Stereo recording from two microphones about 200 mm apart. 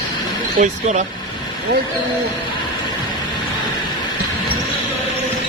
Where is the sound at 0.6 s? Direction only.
40° right (ahead or behind).